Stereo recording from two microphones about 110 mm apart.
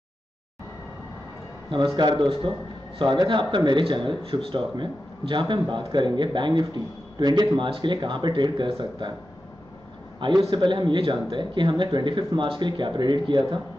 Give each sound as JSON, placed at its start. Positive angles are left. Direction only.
{"t": 2.0, "sound": "speech", "side_deg": -40}
{"t": 10.5, "sound": "speech", "side_deg": -45}